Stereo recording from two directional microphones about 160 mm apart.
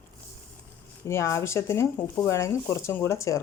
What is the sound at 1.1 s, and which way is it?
Speech, 15° left (ahead or behind).